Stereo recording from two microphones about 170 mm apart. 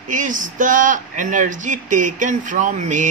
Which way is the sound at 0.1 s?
50° right (ahead or behind).